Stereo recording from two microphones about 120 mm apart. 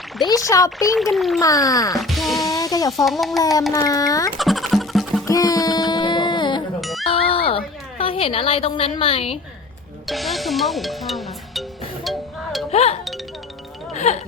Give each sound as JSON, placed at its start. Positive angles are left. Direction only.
{"t": 0.3, "sound": "a child's voice", "side_deg": 30}
{"t": 0.9, "sound": "a child's voice", "side_deg": 0}
{"t": 1.4, "sound": "a child's voice", "side_deg": 30}
{"t": 2.0, "sound": "music", "side_deg": 0}
{"t": 2.5, "sound": "a sound", "side_deg": 30}
{"t": 3.0, "sound": "a child's voice", "side_deg": 0}
{"t": 3.8, "sound": "a child's voice", "side_deg": 30}
{"t": 4.4, "sound": "music", "side_deg": 0}
{"t": 5.2, "sound": "music", "side_deg": 30}
{"t": 7.1, "sound": "a sound", "side_deg": 50}
{"t": 10.1, "sound": "speech", "side_deg": 0}
{"t": 12.0, "sound": "music", "side_deg": 0}
{"t": 12.7, "sound": "music", "side_deg": 60}
{"t": 13.9, "sound": "music", "side_deg": 70}